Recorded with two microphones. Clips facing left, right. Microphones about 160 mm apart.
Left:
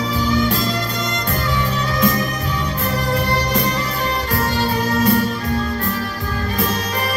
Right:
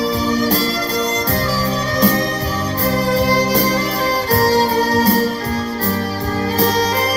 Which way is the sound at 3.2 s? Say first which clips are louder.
Right 4 dB; 35° right (ahead or behind).